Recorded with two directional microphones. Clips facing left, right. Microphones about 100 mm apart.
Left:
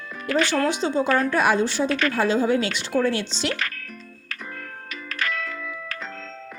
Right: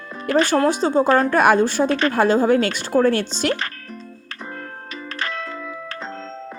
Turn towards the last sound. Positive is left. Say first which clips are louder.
# right 4 dB
turn(degrees=-30)  # may be behind; listen again after turning